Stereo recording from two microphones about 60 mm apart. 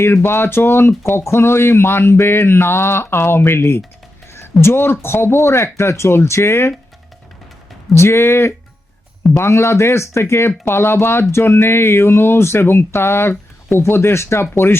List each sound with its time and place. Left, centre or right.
0.0 s speech: left
7.9 s speech: left